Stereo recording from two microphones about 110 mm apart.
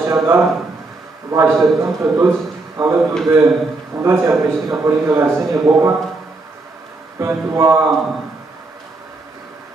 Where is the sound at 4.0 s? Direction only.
25° right (ahead or behind).